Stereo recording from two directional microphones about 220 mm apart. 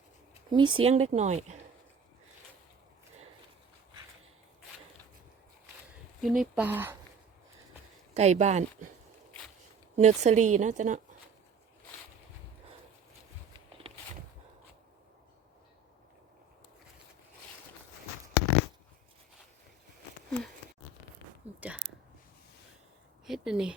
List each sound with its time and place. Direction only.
0.5 s speech: 20° right (ahead or behind)
6.2 s speech: centre (ahead or behind)
8.1 s speech: 30° right (ahead or behind)
9.9 s speech: 30° right (ahead or behind)
21.5 s a sound: 30° right (ahead or behind)
23.2 s a sound: centre (ahead or behind)